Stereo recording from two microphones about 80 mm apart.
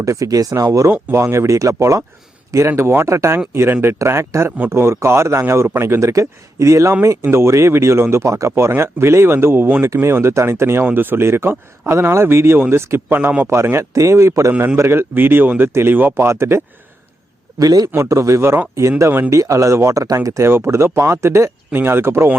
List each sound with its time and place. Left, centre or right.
0.0 s speech: right
13.1 s speech: right
13.5 s speech: right
17.6 s speech: right
17.9 s speech: right
21.7 s speech: right